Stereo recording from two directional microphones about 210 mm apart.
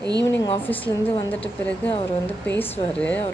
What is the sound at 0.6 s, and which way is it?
Speech, 10° left (ahead or behind).